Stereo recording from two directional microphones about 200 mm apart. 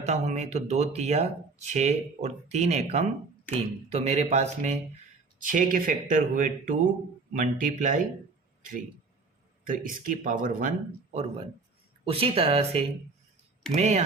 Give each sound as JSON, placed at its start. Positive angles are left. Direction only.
{"t": 0.0, "sound": "speech", "side_deg": -35}
{"t": 9.6, "sound": "speech", "side_deg": -40}